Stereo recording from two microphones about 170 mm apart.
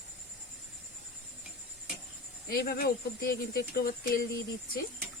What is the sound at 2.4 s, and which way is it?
Speech, 60° left (ahead or behind).